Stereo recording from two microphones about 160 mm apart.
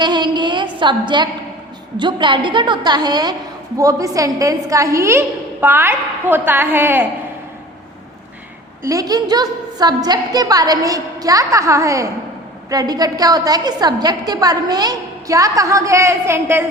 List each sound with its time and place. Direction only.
0.0 s a sound: 30° right (ahead or behind)
2.0 s a woman's voice: 30° right (ahead or behind); by 7.1 s 15° right (ahead or behind)
8.8 s a woman's voice: 20° right (ahead or behind)